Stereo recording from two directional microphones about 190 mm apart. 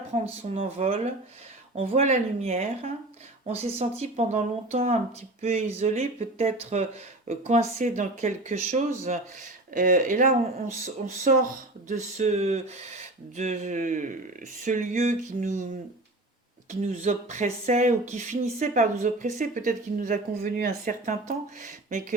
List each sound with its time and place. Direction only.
0.1 s speech: 30° right (ahead or behind)
16.8 s speech: 35° right (ahead or behind)